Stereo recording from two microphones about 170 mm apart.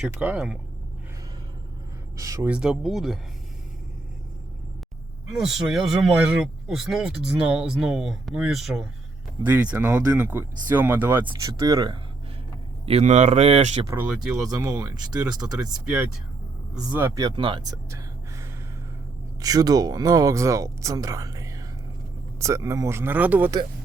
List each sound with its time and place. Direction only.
0.0 s speech: 10° right (ahead or behind)
2.1 s speech: 20° right (ahead or behind)
2.5 s speech: 5° right (ahead or behind)
5.3 s speech: centre (ahead or behind)
11.6 s speech: 25° right (ahead or behind)
12.8 s speech: 35° right (ahead or behind)
13.8 s speech: 15° right (ahead or behind)
16.9 s speech: 15° right (ahead or behind)